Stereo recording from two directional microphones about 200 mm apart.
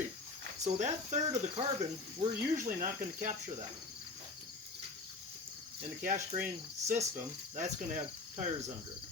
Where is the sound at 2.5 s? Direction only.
40° right (ahead or behind).